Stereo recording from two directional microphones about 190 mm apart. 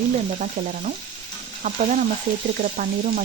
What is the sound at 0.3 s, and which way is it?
Frying, 40° right (ahead or behind).